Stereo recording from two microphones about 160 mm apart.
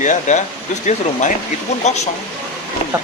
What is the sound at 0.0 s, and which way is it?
Speech, 50° left (ahead or behind).